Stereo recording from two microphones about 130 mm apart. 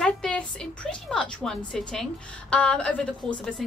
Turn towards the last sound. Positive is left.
turn(degrees=10)  # may be behind; listen again after turning